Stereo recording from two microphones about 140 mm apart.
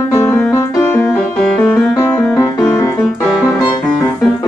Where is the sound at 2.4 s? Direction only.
20° left (ahead or behind).